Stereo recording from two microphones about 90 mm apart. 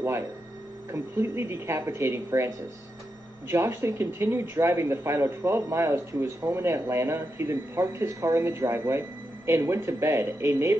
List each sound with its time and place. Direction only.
0.9 s speech: 30° right (ahead or behind)